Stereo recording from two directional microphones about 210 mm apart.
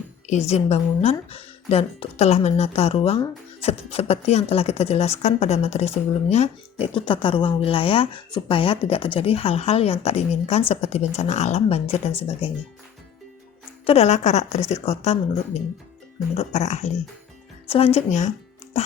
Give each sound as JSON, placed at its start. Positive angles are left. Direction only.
{"t": 0.3, "sound": "a woman's voice", "side_deg": 30}
{"t": 13.8, "sound": "a woman's voice", "side_deg": 30}